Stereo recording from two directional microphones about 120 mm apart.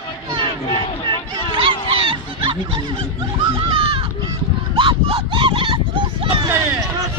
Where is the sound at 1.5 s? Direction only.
45° right (ahead or behind).